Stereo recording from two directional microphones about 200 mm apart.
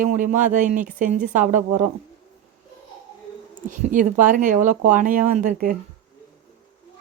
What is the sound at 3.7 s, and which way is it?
Speech, 40° right (ahead or behind).